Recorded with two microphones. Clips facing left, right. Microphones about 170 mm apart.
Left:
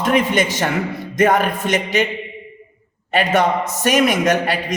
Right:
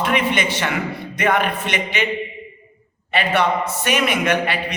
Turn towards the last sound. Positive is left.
turn(degrees=40)  # may be behind; listen again after turning